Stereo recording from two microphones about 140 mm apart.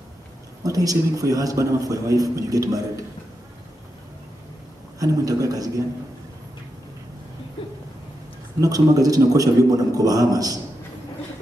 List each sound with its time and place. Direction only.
0.7 s a man's voice: 25° right (ahead or behind)
4.9 s a man's voice: 25° right (ahead or behind)
8.5 s a man's voice: 25° right (ahead or behind)